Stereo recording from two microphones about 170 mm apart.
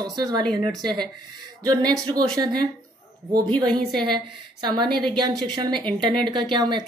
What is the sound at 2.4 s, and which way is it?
Speech, 25° right (ahead or behind).